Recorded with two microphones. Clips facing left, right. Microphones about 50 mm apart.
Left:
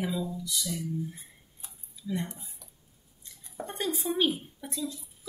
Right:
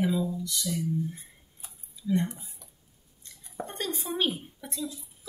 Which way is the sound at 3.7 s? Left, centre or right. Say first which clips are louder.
Left 3 dB; centre.